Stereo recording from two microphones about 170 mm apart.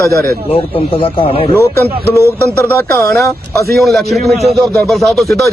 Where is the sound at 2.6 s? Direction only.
15° left (ahead or behind).